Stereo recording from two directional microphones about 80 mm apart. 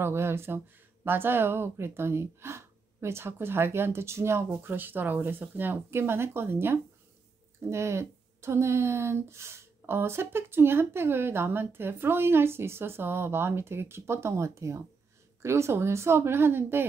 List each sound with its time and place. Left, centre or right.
0.0 s a woman's voice: right